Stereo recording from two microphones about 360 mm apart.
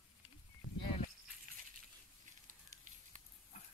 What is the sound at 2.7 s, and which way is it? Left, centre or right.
Fire, right.